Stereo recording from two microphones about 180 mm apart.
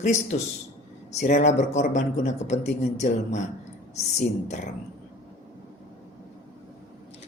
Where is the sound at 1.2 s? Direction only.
40° left (ahead or behind).